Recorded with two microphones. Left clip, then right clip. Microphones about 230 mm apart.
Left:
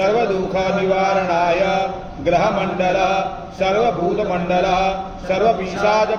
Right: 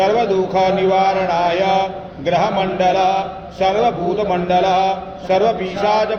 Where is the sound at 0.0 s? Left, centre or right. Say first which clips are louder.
Right 2 dB; right.